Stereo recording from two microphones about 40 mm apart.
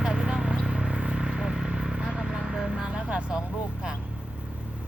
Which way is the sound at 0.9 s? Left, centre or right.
Right.